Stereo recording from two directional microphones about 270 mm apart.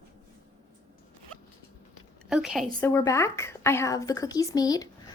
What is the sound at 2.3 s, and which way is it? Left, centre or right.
Speech, centre.